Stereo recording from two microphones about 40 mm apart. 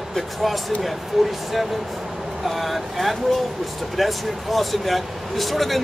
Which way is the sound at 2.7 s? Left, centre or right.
Centre.